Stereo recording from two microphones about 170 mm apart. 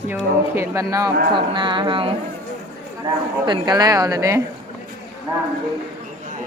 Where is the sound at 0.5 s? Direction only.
20° right (ahead or behind).